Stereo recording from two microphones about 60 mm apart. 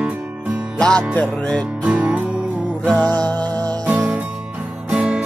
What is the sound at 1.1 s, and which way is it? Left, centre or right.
Music, left.